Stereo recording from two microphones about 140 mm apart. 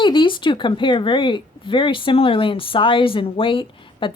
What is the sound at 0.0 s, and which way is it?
Speech, 35° left (ahead or behind).